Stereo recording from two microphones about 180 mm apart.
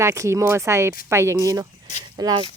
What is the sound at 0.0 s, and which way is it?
Speech, 15° right (ahead or behind).